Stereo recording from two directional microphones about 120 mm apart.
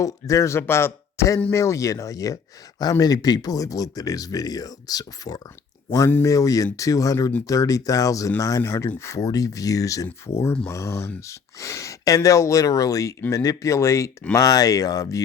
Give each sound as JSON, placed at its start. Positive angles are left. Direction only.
{"t": 0.0, "sound": "speech", "side_deg": 25}
{"t": 5.9, "sound": "speech", "side_deg": 20}
{"t": 10.4, "sound": "speech", "side_deg": 10}
{"t": 10.7, "sound": "speech", "side_deg": 25}